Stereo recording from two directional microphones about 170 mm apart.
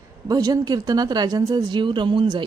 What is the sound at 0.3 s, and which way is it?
A woman's voice, 20° right (ahead or behind).